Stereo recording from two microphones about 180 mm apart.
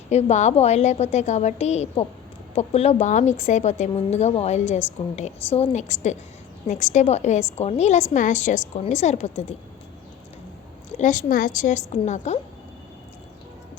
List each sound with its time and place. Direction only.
0.1 s speech: 40° left (ahead or behind)
10.9 s a woman's voice: 45° left (ahead or behind)